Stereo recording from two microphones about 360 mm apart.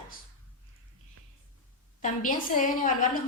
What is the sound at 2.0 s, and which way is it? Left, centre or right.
Speech, left.